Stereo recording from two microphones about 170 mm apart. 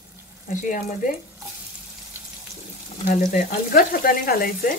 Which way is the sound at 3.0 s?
55° left (ahead or behind).